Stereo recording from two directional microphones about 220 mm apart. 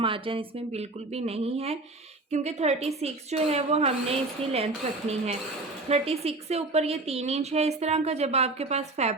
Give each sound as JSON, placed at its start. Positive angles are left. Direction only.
{"t": 0.0, "sound": "a woman's voice", "side_deg": -25}